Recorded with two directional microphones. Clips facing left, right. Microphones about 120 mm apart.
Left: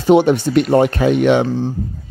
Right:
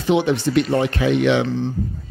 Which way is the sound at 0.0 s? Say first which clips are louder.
Left 6 dB; 45° left (ahead or behind).